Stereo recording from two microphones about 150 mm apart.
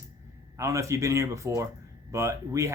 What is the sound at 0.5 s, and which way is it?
Speech, 20° right (ahead or behind).